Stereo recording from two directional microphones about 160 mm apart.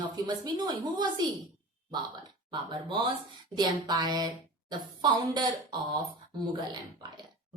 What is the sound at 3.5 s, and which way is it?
A woman's voice, 25° right (ahead or behind).